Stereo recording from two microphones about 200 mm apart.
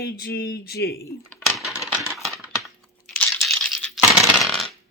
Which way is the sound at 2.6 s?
5° left (ahead or behind).